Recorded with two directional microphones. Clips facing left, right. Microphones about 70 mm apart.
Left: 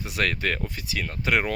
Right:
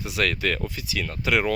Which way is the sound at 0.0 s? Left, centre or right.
Left.